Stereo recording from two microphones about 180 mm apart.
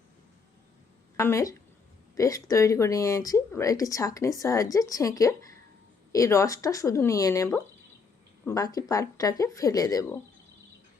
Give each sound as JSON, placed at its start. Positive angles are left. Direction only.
{"t": 1.1, "sound": "a woman's voice", "side_deg": 15}